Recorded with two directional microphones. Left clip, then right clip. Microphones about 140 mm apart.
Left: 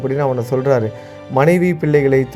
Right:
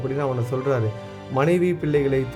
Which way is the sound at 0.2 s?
25° left (ahead or behind).